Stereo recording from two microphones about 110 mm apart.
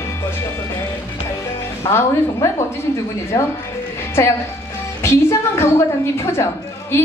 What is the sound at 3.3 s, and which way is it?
Speech, 35° left (ahead or behind).